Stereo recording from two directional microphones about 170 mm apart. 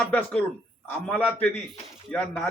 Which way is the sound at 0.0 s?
10° left (ahead or behind).